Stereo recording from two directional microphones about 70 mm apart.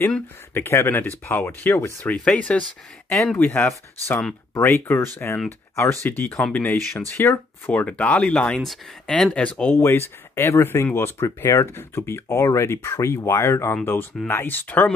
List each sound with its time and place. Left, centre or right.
0.6 s speech: left
2.0 s speech: centre
3.1 s speech: centre
3.3 s speech: left
7.7 s speech: left
8.5 s speech: centre
9.1 s speech: centre
9.8 s speech: left